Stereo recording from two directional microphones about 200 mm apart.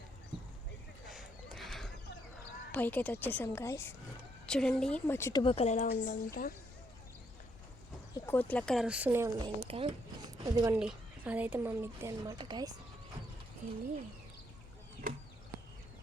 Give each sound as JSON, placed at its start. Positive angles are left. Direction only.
{"t": 1.0, "sound": "horse", "side_deg": 0}
{"t": 2.7, "sound": "a woman's voice", "side_deg": 10}
{"t": 4.4, "sound": "speech", "side_deg": 5}
{"t": 5.4, "sound": "speech", "side_deg": 30}
{"t": 8.1, "sound": "speech", "side_deg": 10}
{"t": 9.6, "sound": "speech", "side_deg": -25}
{"t": 10.8, "sound": "speech", "side_deg": -5}